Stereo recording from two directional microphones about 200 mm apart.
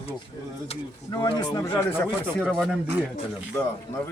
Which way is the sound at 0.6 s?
25° left (ahead or behind).